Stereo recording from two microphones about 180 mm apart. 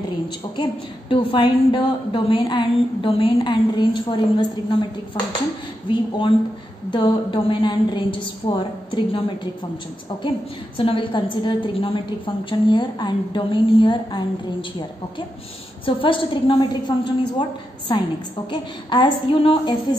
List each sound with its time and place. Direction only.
0.6 s a woman's voice: 30° left (ahead or behind)
5.9 s a woman's voice: 25° left (ahead or behind)
10.8 s a woman's voice: 30° left (ahead or behind)
15.8 s a woman's voice: 30° left (ahead or behind)